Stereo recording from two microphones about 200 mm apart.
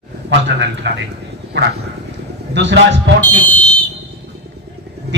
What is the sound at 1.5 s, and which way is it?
A man's voice, 60° right (ahead or behind).